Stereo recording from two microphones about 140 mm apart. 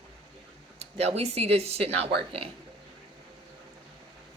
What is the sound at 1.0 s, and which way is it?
Speech, 50° right (ahead or behind).